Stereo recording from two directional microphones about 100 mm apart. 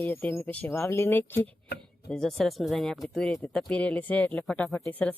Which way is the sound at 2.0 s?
5° left (ahead or behind).